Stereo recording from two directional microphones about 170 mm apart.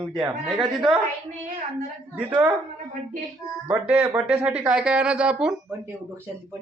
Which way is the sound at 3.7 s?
10° right (ahead or behind).